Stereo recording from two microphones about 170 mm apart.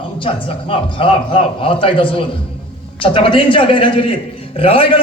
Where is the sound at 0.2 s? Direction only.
30° left (ahead or behind).